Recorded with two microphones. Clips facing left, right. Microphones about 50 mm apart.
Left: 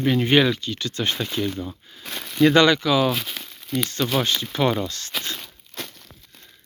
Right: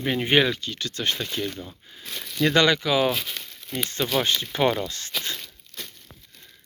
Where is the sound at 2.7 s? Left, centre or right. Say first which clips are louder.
Left 3 dB; centre.